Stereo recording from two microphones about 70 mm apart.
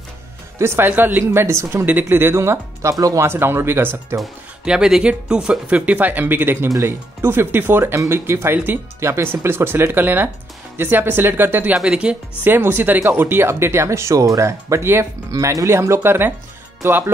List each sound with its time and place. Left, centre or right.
0.6 s speech: right
1.9 s speech: right
3.3 s speech: right
4.6 s speech: centre
5.8 s speech: right
11.7 s speech: centre
12.4 s speech: right
15.3 s speech: right